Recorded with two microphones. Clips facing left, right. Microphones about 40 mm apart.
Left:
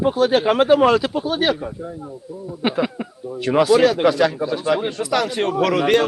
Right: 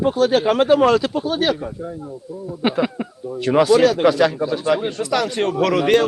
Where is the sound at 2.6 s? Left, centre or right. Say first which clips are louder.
Right 1 dB; centre.